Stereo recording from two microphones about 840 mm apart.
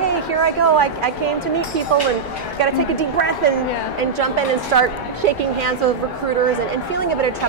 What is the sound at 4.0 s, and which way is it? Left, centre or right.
A woman's voice, right.